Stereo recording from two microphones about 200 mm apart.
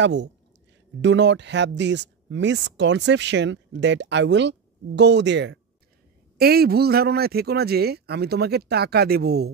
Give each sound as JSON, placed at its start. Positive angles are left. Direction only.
{"t": 0.0, "sound": "speech", "side_deg": -60}
{"t": 6.3, "sound": "speech", "side_deg": -50}